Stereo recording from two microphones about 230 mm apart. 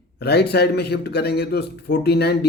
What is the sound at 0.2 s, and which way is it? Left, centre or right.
A man's voice, left.